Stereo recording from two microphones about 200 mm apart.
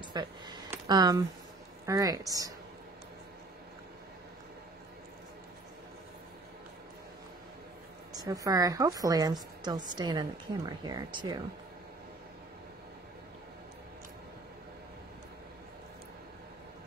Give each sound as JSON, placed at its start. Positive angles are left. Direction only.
{"t": 0.0, "sound": "a woman's voice", "side_deg": -20}
{"t": 8.1, "sound": "a woman's voice", "side_deg": -20}